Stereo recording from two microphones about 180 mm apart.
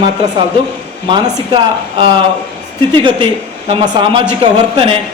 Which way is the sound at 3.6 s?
30° right (ahead or behind).